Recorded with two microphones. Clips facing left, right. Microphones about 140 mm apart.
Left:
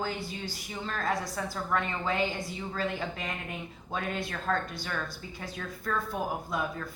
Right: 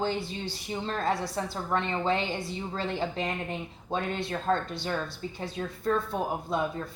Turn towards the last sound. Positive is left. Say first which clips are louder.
# right 3 dB
turn(degrees=-25)  # may be behind; listen again after turning